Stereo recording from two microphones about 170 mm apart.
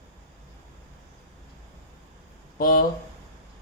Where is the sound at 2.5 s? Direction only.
55° left (ahead or behind).